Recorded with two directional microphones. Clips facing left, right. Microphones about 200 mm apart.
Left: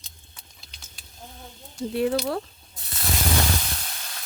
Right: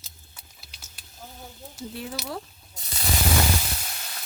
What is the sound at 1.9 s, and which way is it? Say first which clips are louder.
Speech: left 11 dB; 65° left (ahead or behind).